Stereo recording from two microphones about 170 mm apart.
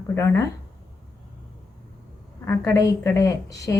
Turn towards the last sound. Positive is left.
turn(degrees=20)  # may be behind; listen again after turning